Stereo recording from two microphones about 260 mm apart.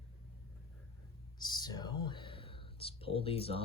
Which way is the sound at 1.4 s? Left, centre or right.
Centre.